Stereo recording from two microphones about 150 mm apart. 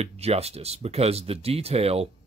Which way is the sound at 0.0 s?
45° right (ahead or behind).